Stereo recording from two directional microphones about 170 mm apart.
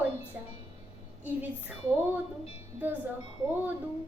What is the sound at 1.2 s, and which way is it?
Child singing, 10° right (ahead or behind).